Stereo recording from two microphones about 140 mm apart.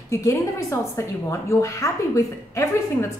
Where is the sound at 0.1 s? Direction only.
20° left (ahead or behind).